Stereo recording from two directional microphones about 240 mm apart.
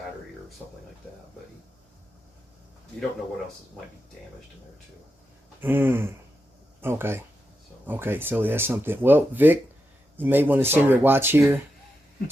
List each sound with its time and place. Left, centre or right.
5.5 s speech: centre